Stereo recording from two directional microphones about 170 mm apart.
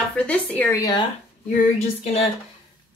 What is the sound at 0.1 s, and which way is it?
Speech, 10° left (ahead or behind).